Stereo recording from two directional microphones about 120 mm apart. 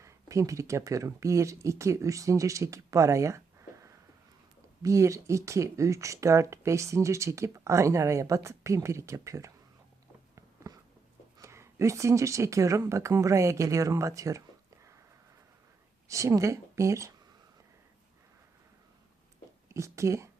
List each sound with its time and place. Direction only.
0.0 s speech: 25° right (ahead or behind)
10.3 s a sound: 25° right (ahead or behind)
11.3 s speech: 25° right (ahead or behind)
16.0 s speech: 25° right (ahead or behind)
19.6 s speech: 25° right (ahead or behind)